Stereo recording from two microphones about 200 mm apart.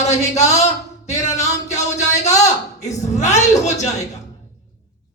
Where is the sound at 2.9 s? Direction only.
35° left (ahead or behind).